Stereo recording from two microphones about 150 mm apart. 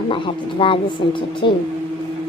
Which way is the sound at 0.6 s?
35° left (ahead or behind).